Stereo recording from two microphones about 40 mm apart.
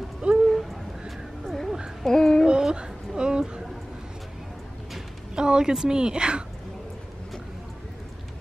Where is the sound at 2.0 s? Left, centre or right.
Centre.